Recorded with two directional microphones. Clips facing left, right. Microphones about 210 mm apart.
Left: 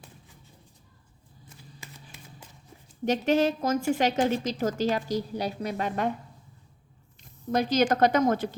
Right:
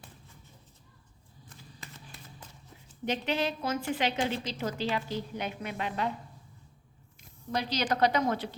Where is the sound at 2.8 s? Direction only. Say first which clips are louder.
Left 7 dB; 45° left (ahead or behind).